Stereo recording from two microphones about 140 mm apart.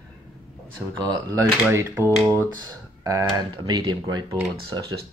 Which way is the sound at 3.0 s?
30° right (ahead or behind).